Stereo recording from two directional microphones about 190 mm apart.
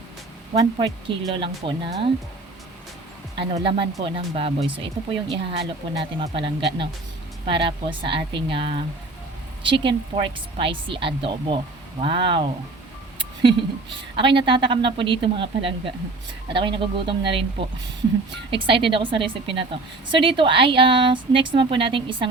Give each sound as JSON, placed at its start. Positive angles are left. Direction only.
{"t": 0.6, "sound": "a woman's voice", "side_deg": -25}
{"t": 3.3, "sound": "a woman's voice", "side_deg": -30}
{"t": 14.2, "sound": "a woman's voice", "side_deg": -25}